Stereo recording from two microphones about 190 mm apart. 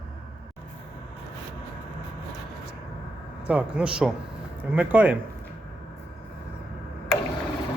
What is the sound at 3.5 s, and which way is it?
Speech, 5° right (ahead or behind).